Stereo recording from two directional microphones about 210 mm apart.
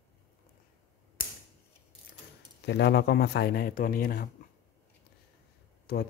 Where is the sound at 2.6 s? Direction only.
55° left (ahead or behind).